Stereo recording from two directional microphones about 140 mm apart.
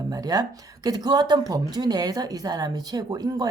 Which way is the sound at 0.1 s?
25° right (ahead or behind).